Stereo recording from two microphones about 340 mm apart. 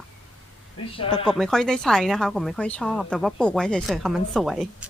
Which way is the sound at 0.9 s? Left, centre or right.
Centre.